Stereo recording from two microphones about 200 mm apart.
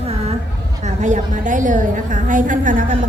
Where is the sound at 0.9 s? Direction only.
40° right (ahead or behind).